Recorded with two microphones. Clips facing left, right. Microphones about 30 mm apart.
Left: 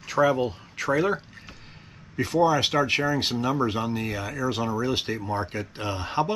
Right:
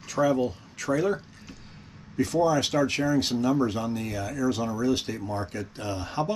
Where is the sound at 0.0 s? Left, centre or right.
Left.